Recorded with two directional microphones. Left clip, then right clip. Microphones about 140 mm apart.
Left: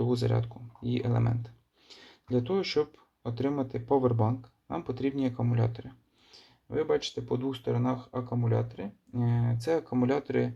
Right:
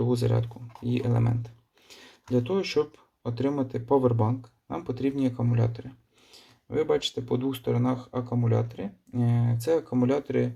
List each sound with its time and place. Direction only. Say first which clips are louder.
0.0 s speech: right 3 dB; 10° right (ahead or behind)
6.3 s speech: right 3 dB; 20° right (ahead or behind); by 10.5 s centre (ahead or behind)